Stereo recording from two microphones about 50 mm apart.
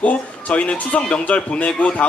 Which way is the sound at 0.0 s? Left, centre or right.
Left.